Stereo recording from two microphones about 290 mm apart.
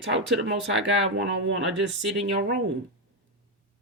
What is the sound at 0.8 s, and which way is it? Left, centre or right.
Speech, right.